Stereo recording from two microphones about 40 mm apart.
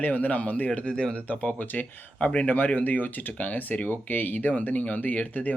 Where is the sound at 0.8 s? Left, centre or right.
Left.